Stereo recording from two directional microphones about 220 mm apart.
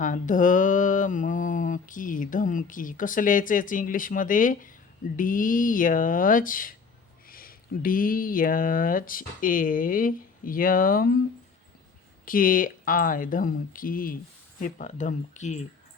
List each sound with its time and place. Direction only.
0.0 s mantra: 35° left (ahead or behind)
12.2 s mantra: 40° left (ahead or behind)